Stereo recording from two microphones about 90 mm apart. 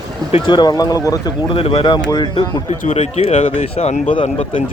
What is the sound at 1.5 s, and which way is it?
Speech, 90° left.